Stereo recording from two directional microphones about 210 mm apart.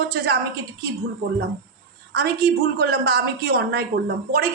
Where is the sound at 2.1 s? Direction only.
50° right (ahead or behind).